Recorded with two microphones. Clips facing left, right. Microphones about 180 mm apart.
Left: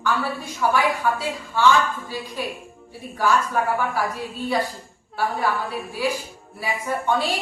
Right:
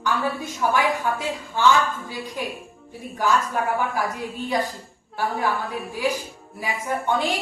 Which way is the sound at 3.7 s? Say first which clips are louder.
Left 1 dB; 15° right (ahead or behind).